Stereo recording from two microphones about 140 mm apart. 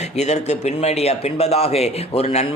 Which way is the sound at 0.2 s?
55° left (ahead or behind).